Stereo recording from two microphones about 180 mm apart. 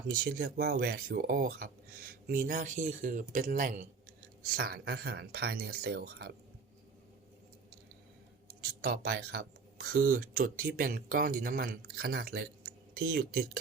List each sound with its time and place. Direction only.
0.1 s speech: 55° right (ahead or behind)
4.5 s speech: 60° right (ahead or behind)
8.4 s speech: 60° right (ahead or behind)